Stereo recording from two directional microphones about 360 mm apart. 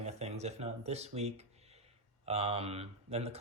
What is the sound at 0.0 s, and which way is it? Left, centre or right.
Speech, centre.